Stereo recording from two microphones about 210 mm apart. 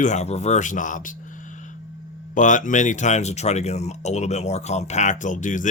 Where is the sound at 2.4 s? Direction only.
35° left (ahead or behind).